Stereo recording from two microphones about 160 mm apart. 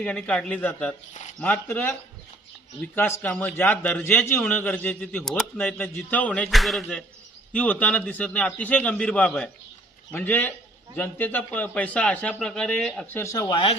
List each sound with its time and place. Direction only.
0.0 s a man's voice: 10° left (ahead or behind)
13.2 s speech: 20° left (ahead or behind)